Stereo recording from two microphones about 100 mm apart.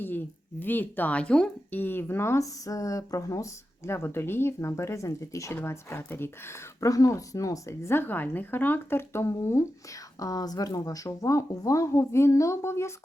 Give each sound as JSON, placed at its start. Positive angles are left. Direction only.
{"t": 0.6, "sound": "speech", "side_deg": 20}
{"t": 1.8, "sound": "speech", "side_deg": 20}
{"t": 3.8, "sound": "speech", "side_deg": 25}
{"t": 6.7, "sound": "speech", "side_deg": 35}